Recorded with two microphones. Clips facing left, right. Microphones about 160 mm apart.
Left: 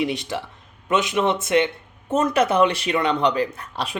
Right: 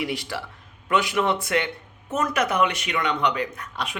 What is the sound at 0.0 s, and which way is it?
A man's voice, 20° left (ahead or behind).